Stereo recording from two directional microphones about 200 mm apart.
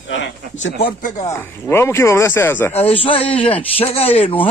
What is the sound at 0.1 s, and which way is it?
Speech, 70° left (ahead or behind).